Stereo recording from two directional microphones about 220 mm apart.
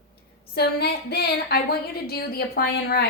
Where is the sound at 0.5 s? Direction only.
45° left (ahead or behind).